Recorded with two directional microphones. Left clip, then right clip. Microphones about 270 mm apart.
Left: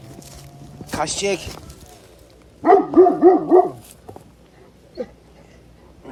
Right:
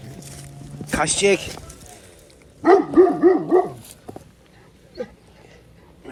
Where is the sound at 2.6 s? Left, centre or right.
Left.